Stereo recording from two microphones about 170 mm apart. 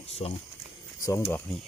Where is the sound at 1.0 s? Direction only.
15° left (ahead or behind).